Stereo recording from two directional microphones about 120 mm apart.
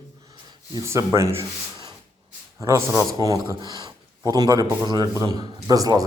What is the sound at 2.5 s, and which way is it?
Speech, 25° right (ahead or behind).